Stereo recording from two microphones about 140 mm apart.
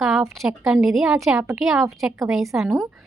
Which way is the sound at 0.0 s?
Centre (ahead or behind).